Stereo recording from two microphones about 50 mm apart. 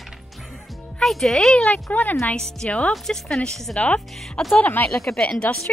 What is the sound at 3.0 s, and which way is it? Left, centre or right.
Speech, centre.